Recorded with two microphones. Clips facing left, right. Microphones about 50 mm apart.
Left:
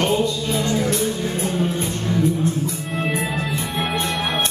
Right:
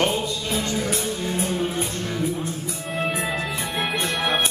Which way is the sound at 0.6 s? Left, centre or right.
Left.